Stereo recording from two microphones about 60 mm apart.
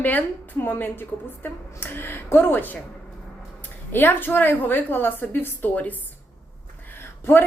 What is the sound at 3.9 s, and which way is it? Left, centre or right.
A woman's voice, left.